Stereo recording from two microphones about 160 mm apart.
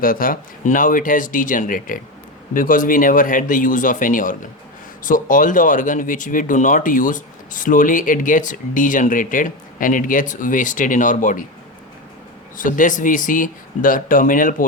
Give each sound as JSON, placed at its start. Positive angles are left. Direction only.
{"t": 0.0, "sound": "speech", "side_deg": 60}
{"t": 12.5, "sound": "speech", "side_deg": 55}